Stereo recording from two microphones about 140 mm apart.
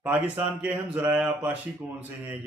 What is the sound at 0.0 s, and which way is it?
A man's voice, 10° right (ahead or behind).